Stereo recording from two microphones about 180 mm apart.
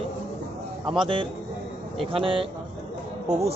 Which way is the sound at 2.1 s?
30° right (ahead or behind).